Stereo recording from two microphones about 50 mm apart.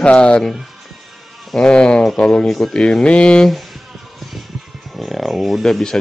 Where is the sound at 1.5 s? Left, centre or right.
Centre.